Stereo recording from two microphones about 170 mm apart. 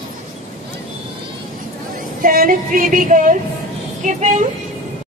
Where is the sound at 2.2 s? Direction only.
55° right (ahead or behind).